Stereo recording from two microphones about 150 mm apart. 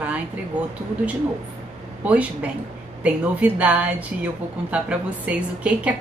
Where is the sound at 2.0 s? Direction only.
10° right (ahead or behind).